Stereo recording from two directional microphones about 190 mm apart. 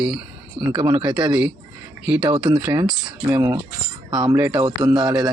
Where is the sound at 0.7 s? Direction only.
25° right (ahead or behind).